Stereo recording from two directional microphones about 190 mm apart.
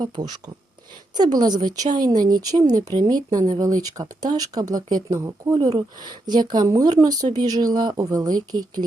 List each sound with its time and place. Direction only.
0.0 s speech: 20° right (ahead or behind)